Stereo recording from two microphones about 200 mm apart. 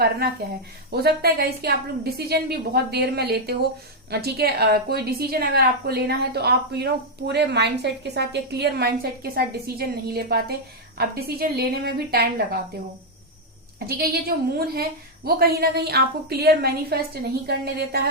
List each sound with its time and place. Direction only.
0.9 s a woman's voice: 50° right (ahead or behind)
13.7 s a woman's voice: 50° right (ahead or behind)